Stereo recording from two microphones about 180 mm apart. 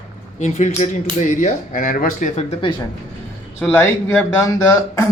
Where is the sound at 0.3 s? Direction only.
40° left (ahead or behind).